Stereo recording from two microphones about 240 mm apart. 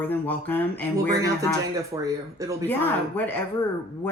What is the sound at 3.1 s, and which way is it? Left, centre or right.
Speech, centre.